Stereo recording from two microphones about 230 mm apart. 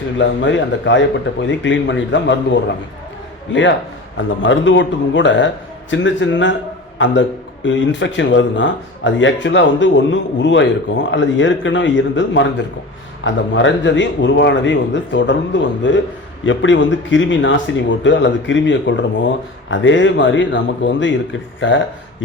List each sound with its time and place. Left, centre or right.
0.2 s speech: left